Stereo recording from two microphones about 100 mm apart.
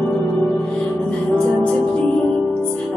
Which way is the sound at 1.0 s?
10° left (ahead or behind).